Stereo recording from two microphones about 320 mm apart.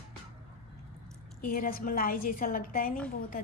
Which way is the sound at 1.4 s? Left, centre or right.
Left.